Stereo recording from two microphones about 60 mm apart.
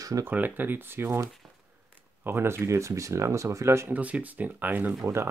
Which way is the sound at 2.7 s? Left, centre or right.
Right.